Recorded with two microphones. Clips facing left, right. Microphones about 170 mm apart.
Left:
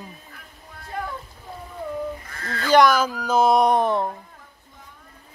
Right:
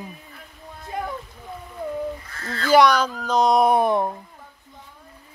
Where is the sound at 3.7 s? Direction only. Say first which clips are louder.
Right 1 dB; 10° right (ahead or behind).